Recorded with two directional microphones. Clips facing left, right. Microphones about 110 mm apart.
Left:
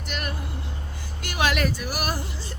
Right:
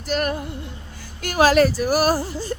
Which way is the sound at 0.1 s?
45° right (ahead or behind).